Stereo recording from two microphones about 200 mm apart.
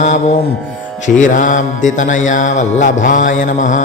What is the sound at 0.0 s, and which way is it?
Music, 35° left (ahead or behind).